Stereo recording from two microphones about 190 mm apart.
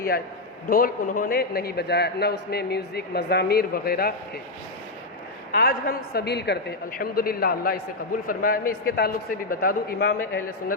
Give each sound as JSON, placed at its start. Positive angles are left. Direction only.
{"t": 0.7, "sound": "a man's voice", "side_deg": 45}
{"t": 5.5, "sound": "a man's voice", "side_deg": 55}